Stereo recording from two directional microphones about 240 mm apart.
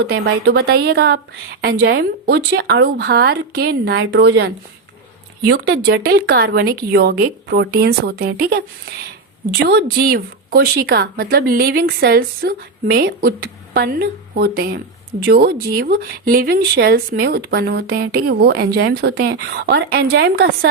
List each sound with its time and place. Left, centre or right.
0.0 s speech: right
5.5 s speech: right
9.6 s speech: right